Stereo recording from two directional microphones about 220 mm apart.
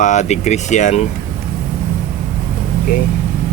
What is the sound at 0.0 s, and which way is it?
Speech, 30° left (ahead or behind).